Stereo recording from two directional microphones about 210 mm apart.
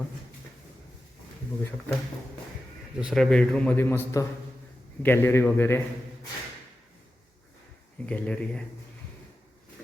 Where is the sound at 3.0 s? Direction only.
Centre (ahead or behind).